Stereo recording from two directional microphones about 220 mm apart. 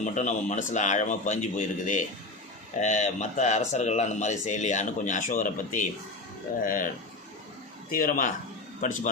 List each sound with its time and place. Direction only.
0.0 s speech: 35° left (ahead or behind)
7.9 s speech: 40° left (ahead or behind)